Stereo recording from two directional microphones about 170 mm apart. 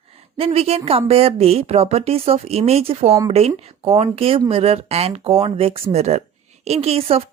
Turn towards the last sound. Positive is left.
turn(degrees=-35)  # may be behind; listen again after turning